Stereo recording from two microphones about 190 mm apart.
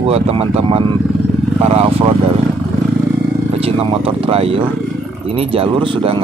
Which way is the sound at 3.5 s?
30° right (ahead or behind).